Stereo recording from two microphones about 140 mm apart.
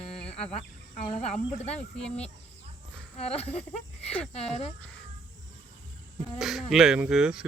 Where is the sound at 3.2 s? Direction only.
45° left (ahead or behind).